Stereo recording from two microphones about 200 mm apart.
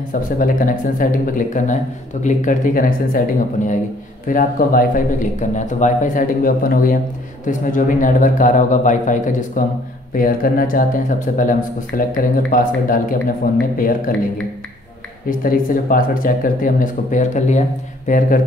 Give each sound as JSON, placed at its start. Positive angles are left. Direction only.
{"t": 0.1, "sound": "a man's voice", "side_deg": 45}
{"t": 15.2, "sound": "speech", "side_deg": 45}